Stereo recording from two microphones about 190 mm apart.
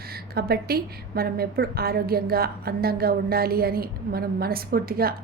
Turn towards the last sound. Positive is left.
turn(degrees=-50)  # may be behind; listen again after turning